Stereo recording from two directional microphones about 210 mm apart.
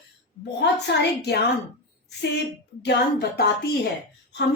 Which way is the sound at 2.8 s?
55° left (ahead or behind).